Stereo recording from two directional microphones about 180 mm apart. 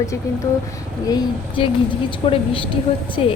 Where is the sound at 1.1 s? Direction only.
30° left (ahead or behind).